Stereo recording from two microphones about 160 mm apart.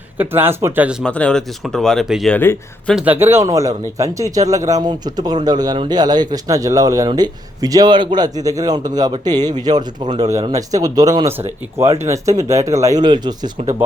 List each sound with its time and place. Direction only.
0.2 s speech: 15° right (ahead or behind)
1.0 s speech: 5° left (ahead or behind)
2.3 s speech: 10° left (ahead or behind)
2.9 s a man's voice: 10° right (ahead or behind); by 13.5 s 25° right (ahead or behind)